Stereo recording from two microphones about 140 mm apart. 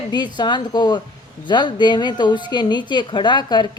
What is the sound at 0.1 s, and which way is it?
A woman's voice, 30° left (ahead or behind).